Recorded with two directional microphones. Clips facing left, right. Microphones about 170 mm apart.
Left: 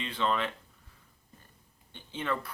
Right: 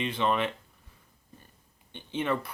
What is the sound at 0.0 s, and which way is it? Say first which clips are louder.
Speech: right 3 dB; 15° right (ahead or behind).